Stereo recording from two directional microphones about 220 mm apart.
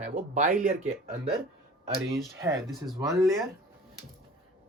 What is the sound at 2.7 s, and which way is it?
Speech, centre (ahead or behind).